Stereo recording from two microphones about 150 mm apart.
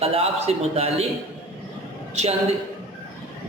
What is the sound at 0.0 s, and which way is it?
A man's voice, 40° right (ahead or behind).